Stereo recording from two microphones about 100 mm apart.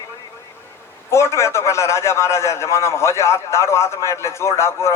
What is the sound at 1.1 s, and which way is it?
A man's voice, 30° left (ahead or behind).